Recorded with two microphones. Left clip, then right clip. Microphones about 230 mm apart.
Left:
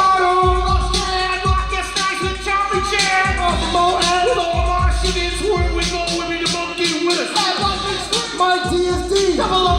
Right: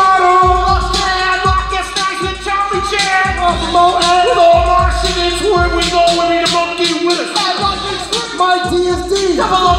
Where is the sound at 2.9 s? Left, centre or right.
Right.